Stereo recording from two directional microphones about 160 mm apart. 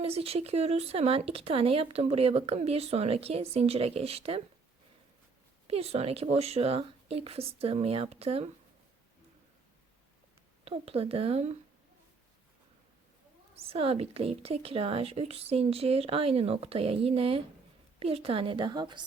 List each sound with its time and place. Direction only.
0.0 s speech: 40° right (ahead or behind)
5.6 s speech: 40° right (ahead or behind)
10.7 s speech: 40° right (ahead or behind)
13.6 s speech: 35° right (ahead or behind)